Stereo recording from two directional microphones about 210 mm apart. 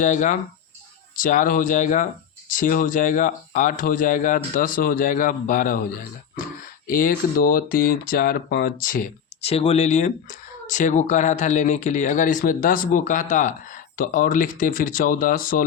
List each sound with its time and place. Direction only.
0.0 s speech: 40° left (ahead or behind)
9.4 s speech: 30° left (ahead or behind)